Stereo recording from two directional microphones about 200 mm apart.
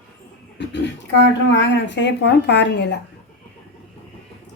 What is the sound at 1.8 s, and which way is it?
Speech, 60° left (ahead or behind).